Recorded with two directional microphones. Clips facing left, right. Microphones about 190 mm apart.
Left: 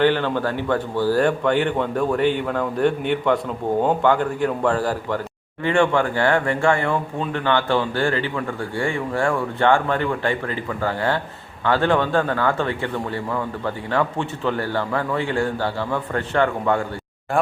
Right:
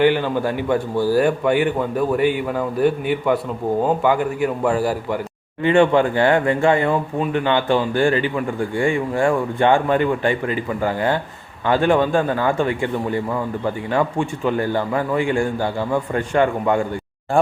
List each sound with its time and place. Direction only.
0.0 s speech: 10° right (ahead or behind)